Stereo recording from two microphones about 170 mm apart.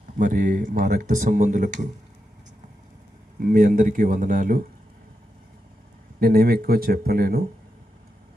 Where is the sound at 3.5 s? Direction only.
50° right (ahead or behind).